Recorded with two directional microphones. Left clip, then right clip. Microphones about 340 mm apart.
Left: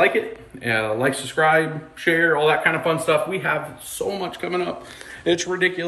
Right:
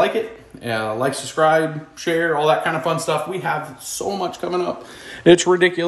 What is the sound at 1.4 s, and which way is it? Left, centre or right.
Speech, centre.